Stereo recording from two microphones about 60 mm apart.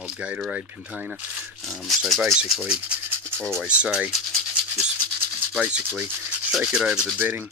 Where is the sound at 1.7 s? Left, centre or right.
Centre.